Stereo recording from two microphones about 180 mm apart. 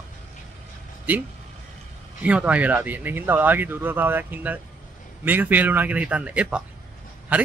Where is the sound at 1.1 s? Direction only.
10° right (ahead or behind).